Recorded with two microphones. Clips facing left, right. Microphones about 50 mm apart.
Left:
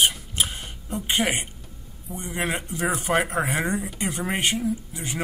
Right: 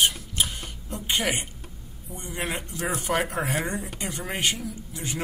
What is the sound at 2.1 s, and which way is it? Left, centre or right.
Speech, centre.